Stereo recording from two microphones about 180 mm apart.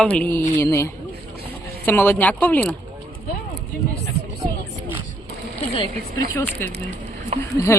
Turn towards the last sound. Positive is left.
turn(degrees=15)  # may be behind; listen again after turning